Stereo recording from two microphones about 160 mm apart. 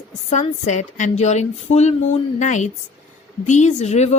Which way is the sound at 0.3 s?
50° left (ahead or behind).